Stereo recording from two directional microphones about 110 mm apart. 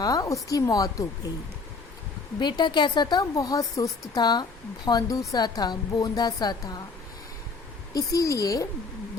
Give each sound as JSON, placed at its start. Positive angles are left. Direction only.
{"t": 0.0, "sound": "a woman's voice", "side_deg": 35}
{"t": 2.4, "sound": "a woman's voice", "side_deg": 45}
{"t": 7.9, "sound": "a woman's voice", "side_deg": 30}